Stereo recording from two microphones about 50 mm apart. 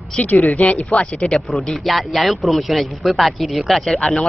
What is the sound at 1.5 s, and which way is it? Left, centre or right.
A man's voice, centre.